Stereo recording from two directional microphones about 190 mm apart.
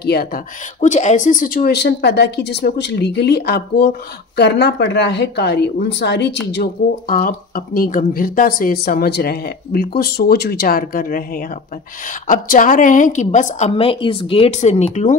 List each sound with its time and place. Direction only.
0.0 s speech: 55° left (ahead or behind)
0.7 s speech: 40° left (ahead or behind); by 6.3 s 65° left (ahead or behind)
6.5 s a woman's voice: 50° left (ahead or behind)